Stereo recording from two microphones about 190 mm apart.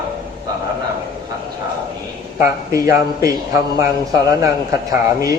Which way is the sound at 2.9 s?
15° right (ahead or behind).